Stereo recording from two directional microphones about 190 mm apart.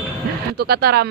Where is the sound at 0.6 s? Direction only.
55° right (ahead or behind).